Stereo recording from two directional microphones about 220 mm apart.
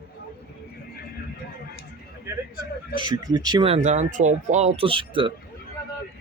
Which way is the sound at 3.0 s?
20° right (ahead or behind).